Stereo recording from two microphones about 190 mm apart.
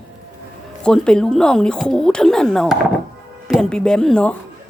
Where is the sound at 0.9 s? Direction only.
5° left (ahead or behind).